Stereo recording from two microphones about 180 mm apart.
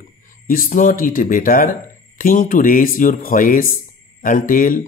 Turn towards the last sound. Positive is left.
turn(degrees=45)  # may be behind; listen again after turning